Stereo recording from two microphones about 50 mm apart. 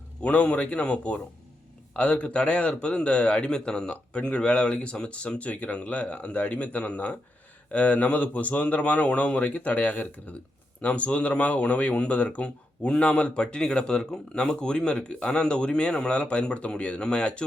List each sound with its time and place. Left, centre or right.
0.2 s speech: left